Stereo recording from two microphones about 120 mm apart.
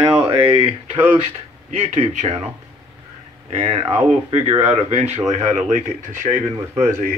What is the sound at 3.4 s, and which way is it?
Speech, 55° right (ahead or behind).